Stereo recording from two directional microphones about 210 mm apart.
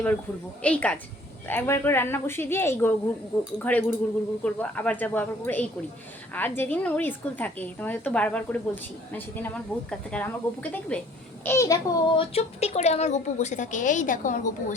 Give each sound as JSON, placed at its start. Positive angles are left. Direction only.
{"t": 0.6, "sound": "a woman's voice", "side_deg": 5}